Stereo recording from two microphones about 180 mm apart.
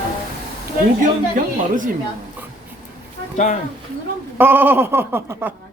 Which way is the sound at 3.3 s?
40° left (ahead or behind).